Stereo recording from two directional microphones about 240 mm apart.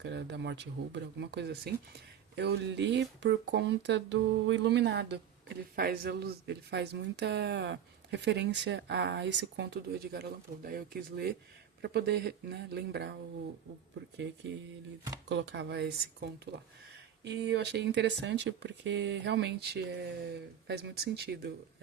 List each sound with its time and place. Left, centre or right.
0.0 s speech: right
15.3 s speech: right